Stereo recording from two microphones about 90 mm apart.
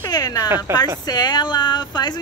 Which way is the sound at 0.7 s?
25° right (ahead or behind).